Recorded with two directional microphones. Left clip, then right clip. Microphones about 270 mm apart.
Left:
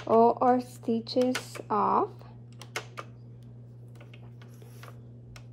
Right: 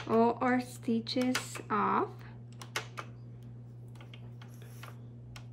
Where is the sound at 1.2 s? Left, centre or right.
Centre.